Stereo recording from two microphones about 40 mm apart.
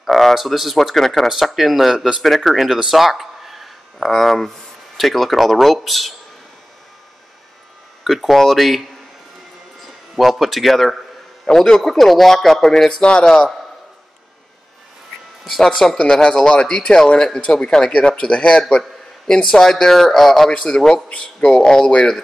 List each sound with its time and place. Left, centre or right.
0.0 s speech: centre
2.9 s a sound: centre
4.0 s speech: centre
8.0 s a man's voice: centre
15.4 s a sound: centre
15.7 s speech: centre
16.0 s speech: left
17.9 s speech: left